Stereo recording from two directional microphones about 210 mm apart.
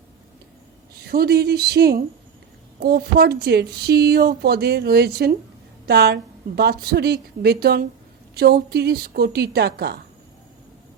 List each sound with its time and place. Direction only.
1.0 s speech: 45° right (ahead or behind)